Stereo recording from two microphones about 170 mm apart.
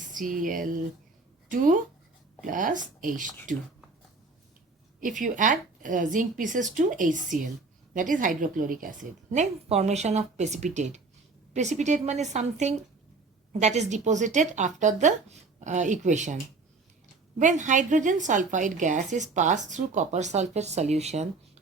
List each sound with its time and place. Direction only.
0.0 s a woman's voice: 50° right (ahead or behind)
4.9 s a woman's voice: 50° right (ahead or behind)